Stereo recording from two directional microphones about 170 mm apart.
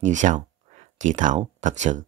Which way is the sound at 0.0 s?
45° right (ahead or behind).